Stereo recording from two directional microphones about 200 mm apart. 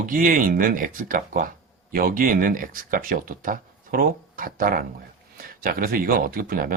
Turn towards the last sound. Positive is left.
turn(degrees=-45)  # may be behind; listen again after turning